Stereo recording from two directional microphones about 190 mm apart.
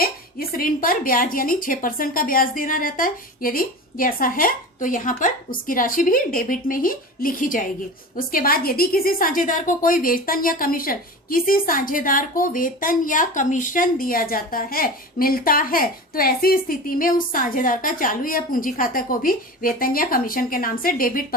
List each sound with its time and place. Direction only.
0.0 s a woman's voice: 50° left (ahead or behind)